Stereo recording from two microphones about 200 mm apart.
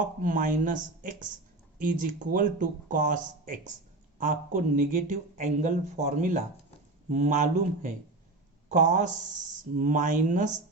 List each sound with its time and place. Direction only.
0.0 s speech: 40° right (ahead or behind)